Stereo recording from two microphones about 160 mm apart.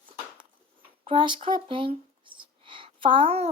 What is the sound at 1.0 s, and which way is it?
Speech, 30° right (ahead or behind).